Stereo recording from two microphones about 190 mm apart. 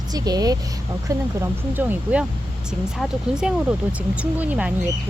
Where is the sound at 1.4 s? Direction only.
10° right (ahead or behind).